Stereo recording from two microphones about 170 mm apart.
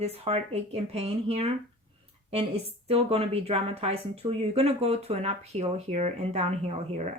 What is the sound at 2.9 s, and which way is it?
Speech, 35° right (ahead or behind).